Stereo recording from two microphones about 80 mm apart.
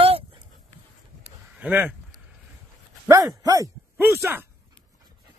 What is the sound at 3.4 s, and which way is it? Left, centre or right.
Speech, right.